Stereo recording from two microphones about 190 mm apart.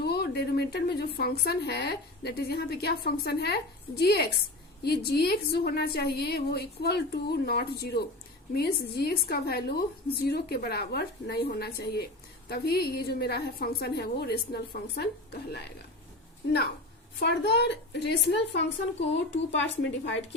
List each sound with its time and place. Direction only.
0.0 s a woman's voice: 55° left (ahead or behind)
17.2 s a woman's voice: 60° left (ahead or behind)